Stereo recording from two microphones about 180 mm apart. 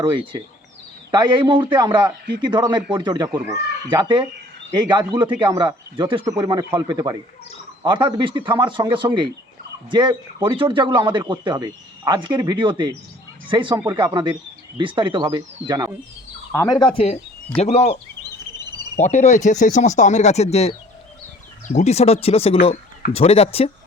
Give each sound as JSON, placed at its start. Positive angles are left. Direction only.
{"t": 1.1, "sound": "speech", "side_deg": -25}
{"t": 13.7, "sound": "speech", "side_deg": -10}
{"t": 14.0, "sound": "speech", "side_deg": -25}
{"t": 16.5, "sound": "speech", "side_deg": 20}
{"t": 18.6, "sound": "cricket", "side_deg": -25}
{"t": 19.0, "sound": "speech", "side_deg": 40}